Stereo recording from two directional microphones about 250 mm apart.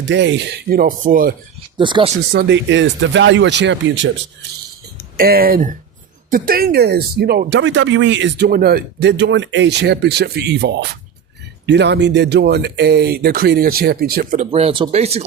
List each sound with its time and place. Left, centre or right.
0.0 s speech: right
1.7 s speech: centre
2.3 s speech: right
5.1 s speech: right